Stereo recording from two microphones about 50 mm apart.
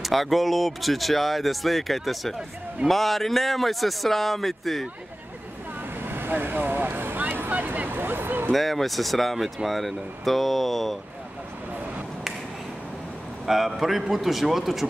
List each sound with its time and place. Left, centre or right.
0.0 s speech: centre
6.0 s vehicle: right
8.5 s speech: centre
13.5 s speech: centre